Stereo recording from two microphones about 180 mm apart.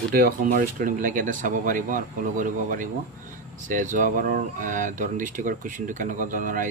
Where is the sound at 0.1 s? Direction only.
50° right (ahead or behind).